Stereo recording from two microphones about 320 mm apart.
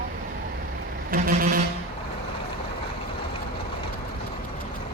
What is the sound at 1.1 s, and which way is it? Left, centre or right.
Vehicle, right.